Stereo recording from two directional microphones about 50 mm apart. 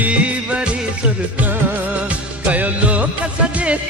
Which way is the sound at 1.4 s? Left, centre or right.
Right.